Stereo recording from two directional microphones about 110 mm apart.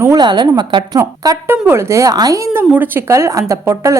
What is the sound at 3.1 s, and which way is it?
Speech, 30° right (ahead or behind).